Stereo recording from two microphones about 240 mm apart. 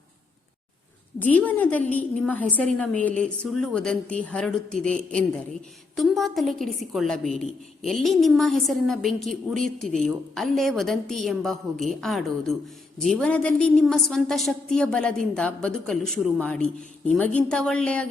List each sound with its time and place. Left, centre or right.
1.2 s a woman's voice: centre